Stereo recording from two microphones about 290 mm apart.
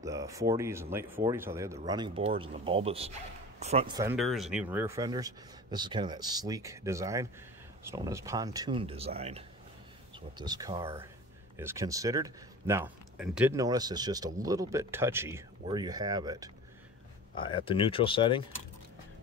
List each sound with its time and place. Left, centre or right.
0.0 s speech: centre
17.4 s speech: centre